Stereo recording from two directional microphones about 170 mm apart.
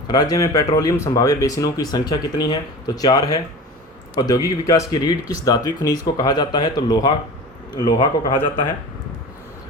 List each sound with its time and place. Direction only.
0.1 s speech: 20° left (ahead or behind)